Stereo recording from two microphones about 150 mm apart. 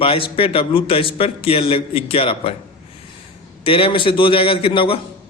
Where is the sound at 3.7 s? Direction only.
35° left (ahead or behind).